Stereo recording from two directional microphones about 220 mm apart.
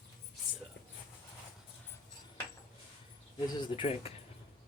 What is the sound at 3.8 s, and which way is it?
Speech, 25° left (ahead or behind).